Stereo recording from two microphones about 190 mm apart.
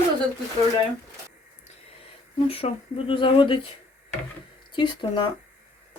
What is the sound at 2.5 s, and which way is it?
Speech, 30° left (ahead or behind).